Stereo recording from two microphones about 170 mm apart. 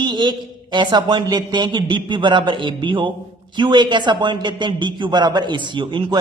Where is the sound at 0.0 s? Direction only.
25° right (ahead or behind).